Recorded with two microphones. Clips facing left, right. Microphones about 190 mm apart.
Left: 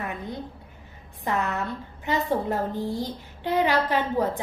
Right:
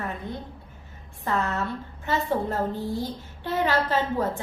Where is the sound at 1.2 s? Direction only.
15° left (ahead or behind).